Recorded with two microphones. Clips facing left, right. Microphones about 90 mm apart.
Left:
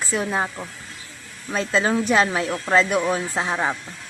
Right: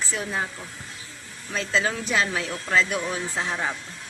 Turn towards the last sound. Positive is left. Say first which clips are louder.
# left 4 dB
turn(degrees=35)  # may be behind; listen again after turning